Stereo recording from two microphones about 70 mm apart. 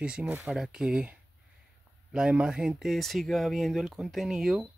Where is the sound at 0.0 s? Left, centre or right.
Centre.